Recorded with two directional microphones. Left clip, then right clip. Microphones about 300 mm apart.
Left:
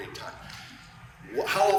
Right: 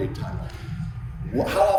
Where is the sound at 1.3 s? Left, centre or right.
Centre.